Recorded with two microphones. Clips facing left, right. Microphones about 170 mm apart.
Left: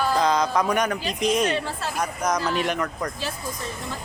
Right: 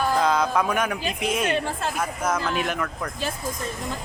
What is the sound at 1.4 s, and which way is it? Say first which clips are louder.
Speech: even; 50° right (ahead or behind).